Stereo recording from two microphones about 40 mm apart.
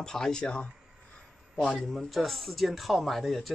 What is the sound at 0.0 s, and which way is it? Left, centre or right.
Speech, centre.